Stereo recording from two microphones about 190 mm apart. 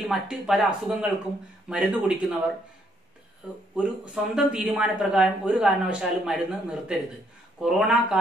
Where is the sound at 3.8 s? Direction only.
5° right (ahead or behind).